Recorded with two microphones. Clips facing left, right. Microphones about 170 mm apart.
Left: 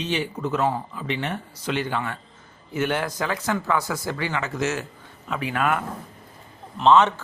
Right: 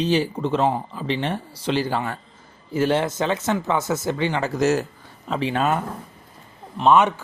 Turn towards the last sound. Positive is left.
turn(degrees=-10)  # may be behind; listen again after turning